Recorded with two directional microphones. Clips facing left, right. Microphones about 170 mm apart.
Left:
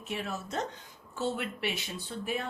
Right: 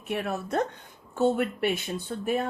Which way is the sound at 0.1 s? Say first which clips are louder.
Right 7 dB; 60° right (ahead or behind).